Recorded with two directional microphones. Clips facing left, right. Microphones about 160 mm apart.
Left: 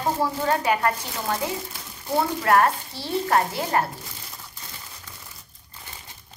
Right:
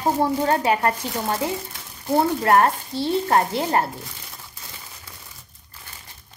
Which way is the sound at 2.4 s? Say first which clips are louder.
Right 2 dB; 30° right (ahead or behind).